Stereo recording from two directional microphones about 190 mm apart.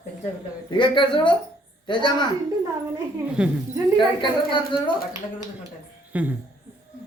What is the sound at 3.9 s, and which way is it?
Speech, 25° left (ahead or behind).